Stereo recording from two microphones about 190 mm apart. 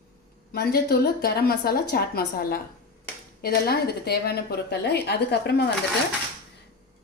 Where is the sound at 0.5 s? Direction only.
55° left (ahead or behind).